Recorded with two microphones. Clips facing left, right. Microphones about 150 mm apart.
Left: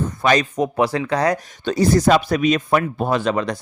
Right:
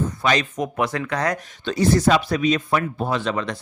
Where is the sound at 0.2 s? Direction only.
45° left (ahead or behind).